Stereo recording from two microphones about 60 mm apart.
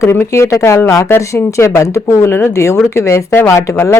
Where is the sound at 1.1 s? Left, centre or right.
Left.